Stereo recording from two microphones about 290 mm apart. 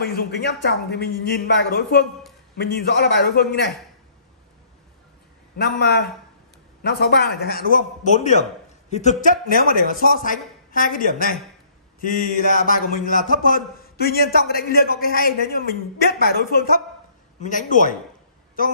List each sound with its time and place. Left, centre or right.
0.0 s a man's voice: left
5.6 s a man's voice: left